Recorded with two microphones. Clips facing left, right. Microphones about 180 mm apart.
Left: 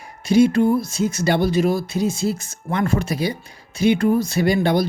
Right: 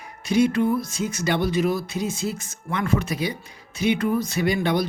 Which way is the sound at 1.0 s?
35° left (ahead or behind).